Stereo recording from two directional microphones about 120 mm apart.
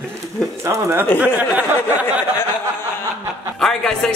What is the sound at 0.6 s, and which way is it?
Speech, 25° right (ahead or behind).